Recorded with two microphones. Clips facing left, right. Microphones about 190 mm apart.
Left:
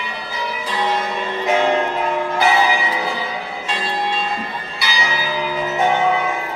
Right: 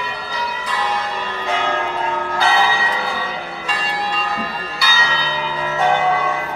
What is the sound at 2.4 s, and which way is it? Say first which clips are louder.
Change ringing: left 1 dB; 20° left (ahead or behind).